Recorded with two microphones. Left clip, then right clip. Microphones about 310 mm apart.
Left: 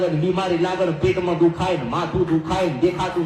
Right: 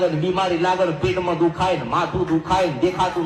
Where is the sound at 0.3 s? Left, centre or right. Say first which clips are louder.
Right 2 dB; right.